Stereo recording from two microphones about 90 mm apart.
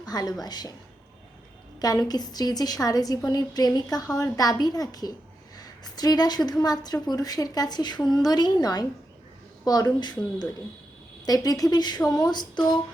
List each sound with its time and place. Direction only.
0.0 s a woman's voice: 45° left (ahead or behind)
1.8 s a woman's voice: 45° left (ahead or behind)